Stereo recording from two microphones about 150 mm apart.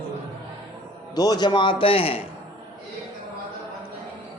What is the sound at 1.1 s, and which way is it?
Speech, 25° left (ahead or behind).